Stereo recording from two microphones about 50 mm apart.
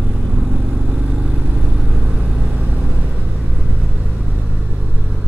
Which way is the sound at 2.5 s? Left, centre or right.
Right.